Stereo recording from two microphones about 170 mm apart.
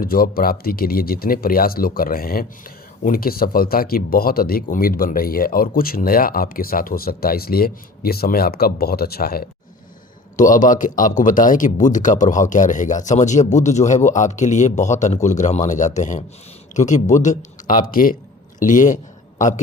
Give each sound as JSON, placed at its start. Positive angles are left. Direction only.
{"t": 0.0, "sound": "speech", "side_deg": 60}
{"t": 10.3, "sound": "a man's voice", "side_deg": 50}